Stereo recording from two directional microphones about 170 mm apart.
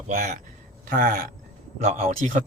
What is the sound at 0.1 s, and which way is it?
A man's voice, 50° right (ahead or behind).